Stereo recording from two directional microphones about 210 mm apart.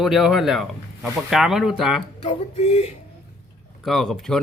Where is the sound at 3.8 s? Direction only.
Centre (ahead or behind).